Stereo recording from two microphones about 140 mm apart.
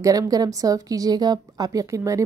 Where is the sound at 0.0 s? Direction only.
25° right (ahead or behind).